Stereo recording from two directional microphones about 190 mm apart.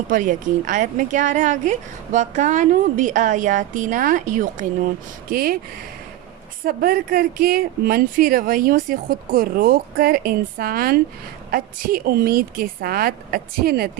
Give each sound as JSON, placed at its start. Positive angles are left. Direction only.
{"t": 0.1, "sound": "a woman's voice", "side_deg": -45}
{"t": 6.7, "sound": "speech", "side_deg": -50}